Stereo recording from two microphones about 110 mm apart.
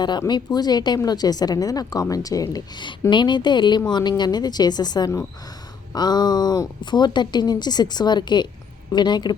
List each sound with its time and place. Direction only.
0.0 s a woman's voice: 40° left (ahead or behind)